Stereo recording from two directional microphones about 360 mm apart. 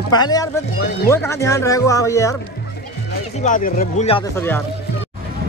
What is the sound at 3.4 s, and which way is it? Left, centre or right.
Speech, left.